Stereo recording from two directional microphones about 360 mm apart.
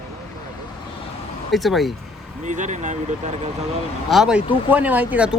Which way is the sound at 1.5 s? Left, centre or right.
Centre.